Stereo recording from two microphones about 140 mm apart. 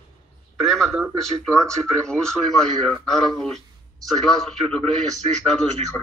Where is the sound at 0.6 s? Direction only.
Centre (ahead or behind).